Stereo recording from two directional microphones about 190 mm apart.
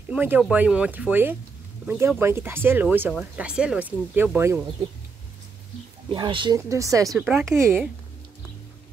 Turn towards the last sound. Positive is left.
turn(degrees=-15)  # may be behind; listen again after turning